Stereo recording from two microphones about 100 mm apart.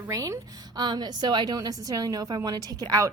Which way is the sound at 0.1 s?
35° right (ahead or behind).